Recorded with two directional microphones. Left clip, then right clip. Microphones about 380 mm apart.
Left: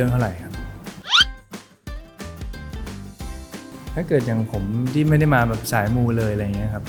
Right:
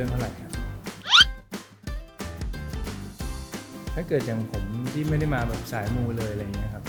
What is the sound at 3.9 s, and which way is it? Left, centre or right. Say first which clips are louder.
Speech: left 6 dB; centre.